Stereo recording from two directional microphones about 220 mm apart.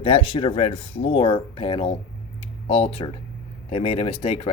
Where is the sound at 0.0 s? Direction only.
25° left (ahead or behind).